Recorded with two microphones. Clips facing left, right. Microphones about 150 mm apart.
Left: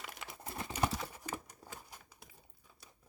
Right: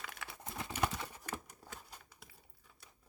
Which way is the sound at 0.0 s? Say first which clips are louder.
Left 1 dB; 15° left (ahead or behind).